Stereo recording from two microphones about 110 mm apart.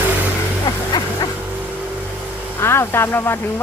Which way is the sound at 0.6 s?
40° left (ahead or behind).